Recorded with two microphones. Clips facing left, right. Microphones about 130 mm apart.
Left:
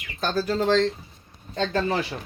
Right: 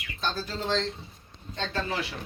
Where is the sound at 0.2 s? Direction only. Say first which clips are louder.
Left 6 dB; 50° left (ahead or behind).